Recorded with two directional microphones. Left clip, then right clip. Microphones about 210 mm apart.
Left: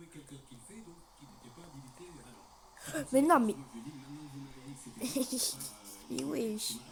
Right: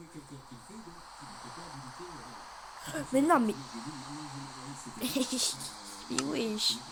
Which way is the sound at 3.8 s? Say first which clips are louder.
Right 7 dB; 25° right (ahead or behind).